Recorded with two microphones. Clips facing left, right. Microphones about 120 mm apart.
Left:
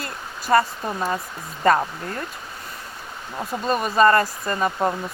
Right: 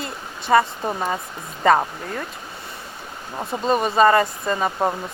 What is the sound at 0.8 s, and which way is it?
Speech, 20° right (ahead or behind).